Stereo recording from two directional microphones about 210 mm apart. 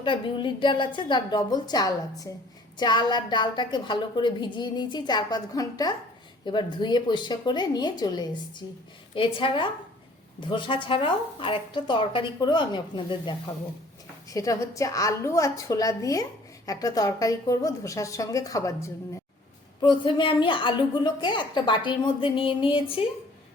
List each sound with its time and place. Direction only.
0.0 s a woman's voice: 25° left (ahead or behind)